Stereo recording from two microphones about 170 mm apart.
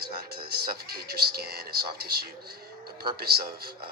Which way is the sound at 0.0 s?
65° right (ahead or behind).